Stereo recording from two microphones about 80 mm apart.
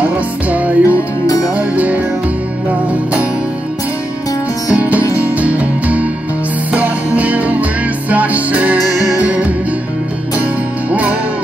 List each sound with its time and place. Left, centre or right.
0.0 s music: centre
0.8 s music: left
1.6 s music: centre
4.7 s music: centre
5.0 s music: left
5.4 s music: centre
10.9 s music: centre